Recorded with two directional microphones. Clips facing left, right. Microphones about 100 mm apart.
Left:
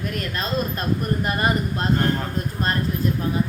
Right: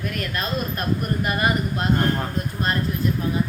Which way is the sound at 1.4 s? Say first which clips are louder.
Even; 35° left (ahead or behind).